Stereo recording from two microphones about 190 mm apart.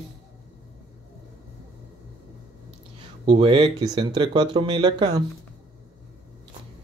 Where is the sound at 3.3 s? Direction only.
30° right (ahead or behind).